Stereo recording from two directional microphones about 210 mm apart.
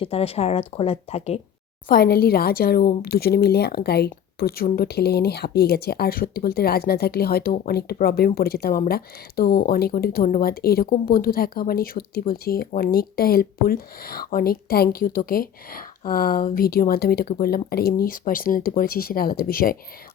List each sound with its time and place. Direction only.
0.0 s speech: 30° left (ahead or behind)
1.9 s speech: 45° left (ahead or behind)